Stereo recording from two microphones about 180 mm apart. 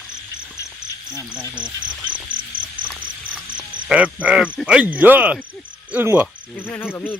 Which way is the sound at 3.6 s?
5° right (ahead or behind).